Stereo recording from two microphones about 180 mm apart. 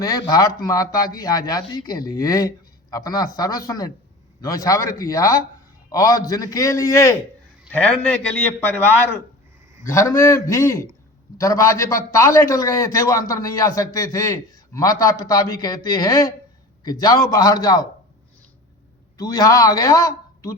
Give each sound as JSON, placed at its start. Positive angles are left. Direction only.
{"t": 0.0, "sound": "a man's voice", "side_deg": 20}
{"t": 19.1, "sound": "a man's voice", "side_deg": 20}